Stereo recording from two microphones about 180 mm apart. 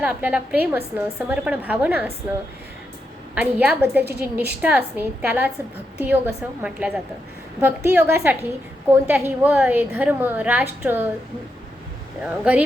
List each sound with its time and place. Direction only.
0.0 s a woman's voice: 10° right (ahead or behind)
3.3 s a woman's voice: 10° right (ahead or behind)
12.2 s a woman's voice: 10° right (ahead or behind)